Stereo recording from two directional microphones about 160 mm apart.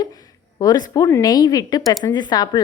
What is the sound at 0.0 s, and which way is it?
A woman's voice, 25° left (ahead or behind).